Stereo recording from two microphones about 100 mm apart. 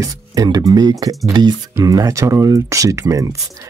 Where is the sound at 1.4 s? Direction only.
50° right (ahead or behind).